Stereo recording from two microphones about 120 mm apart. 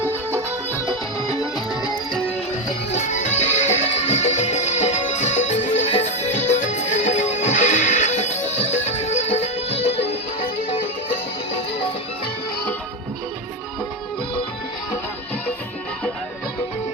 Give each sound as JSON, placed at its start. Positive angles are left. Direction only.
{"t": 1.3, "sound": "music", "side_deg": 35}
{"t": 2.9, "sound": "music", "side_deg": 80}